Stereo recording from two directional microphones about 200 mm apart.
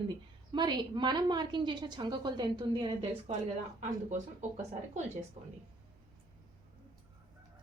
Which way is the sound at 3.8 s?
35° right (ahead or behind).